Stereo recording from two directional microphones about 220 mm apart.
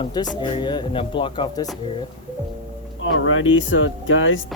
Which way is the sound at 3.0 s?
65° left (ahead or behind).